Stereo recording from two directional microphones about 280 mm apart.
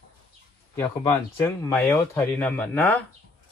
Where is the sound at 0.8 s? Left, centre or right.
Centre.